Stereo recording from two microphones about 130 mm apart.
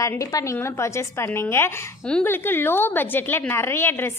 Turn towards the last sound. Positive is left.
turn(degrees=20)  # may be behind; listen again after turning